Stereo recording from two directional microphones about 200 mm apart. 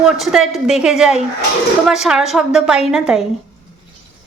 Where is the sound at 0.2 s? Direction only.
Centre (ahead or behind).